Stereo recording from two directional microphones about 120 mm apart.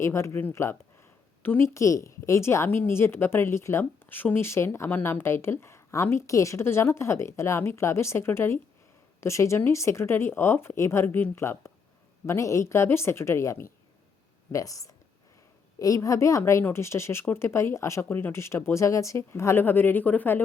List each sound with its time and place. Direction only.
0.0 s a woman's voice: 25° left (ahead or behind)